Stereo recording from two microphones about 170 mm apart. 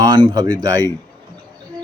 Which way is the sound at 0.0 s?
25° right (ahead or behind).